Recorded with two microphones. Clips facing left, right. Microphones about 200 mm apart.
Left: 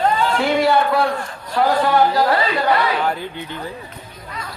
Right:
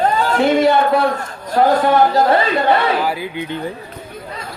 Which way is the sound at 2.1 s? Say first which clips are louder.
Right 3 dB; 25° right (ahead or behind).